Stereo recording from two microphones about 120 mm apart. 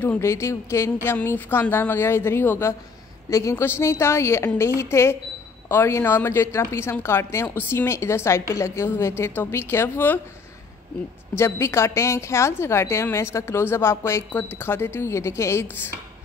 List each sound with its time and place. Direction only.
0.0 s a woman's voice: 20° left (ahead or behind)
11.3 s a woman's voice: 20° left (ahead or behind)